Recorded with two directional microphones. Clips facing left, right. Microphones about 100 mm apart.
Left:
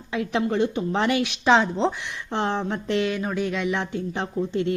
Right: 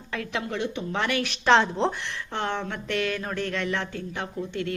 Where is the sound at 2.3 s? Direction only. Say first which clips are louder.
Left 5 dB; 25° left (ahead or behind).